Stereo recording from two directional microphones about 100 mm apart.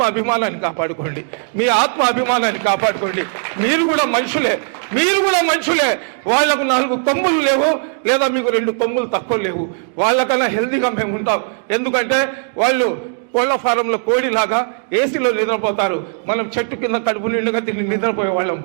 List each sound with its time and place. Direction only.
0.0 s a man's voice: 20° right (ahead or behind)